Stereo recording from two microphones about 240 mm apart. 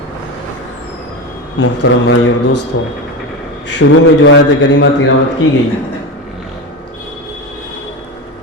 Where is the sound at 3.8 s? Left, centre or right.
Left.